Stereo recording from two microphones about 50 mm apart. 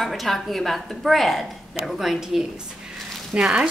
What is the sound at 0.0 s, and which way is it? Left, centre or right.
A woman's voice, centre.